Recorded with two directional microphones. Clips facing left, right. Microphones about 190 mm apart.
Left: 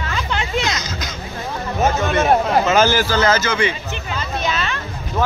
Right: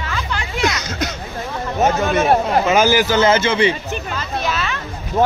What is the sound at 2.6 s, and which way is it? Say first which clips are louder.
A man's voice: right 1 dB; 15° right (ahead or behind).